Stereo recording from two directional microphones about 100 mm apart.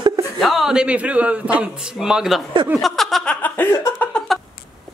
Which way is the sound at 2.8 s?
Centre (ahead or behind).